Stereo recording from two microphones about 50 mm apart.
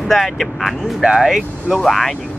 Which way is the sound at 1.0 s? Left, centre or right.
Centre.